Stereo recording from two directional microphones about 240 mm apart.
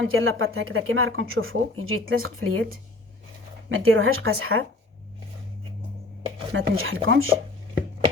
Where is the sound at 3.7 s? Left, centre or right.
Right.